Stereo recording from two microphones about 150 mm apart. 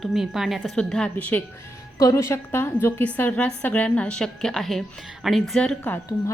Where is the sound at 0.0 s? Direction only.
Centre (ahead or behind).